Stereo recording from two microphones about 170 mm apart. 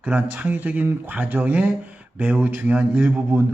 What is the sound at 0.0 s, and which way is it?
A man's voice, 5° right (ahead or behind).